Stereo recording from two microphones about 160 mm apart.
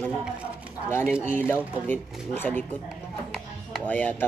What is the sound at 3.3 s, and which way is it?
Music, 5° left (ahead or behind).